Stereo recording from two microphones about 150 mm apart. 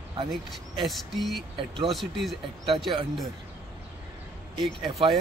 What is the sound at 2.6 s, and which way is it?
Speech, 35° right (ahead or behind).